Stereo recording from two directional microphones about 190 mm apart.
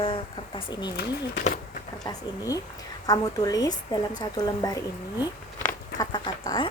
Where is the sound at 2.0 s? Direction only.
20° left (ahead or behind).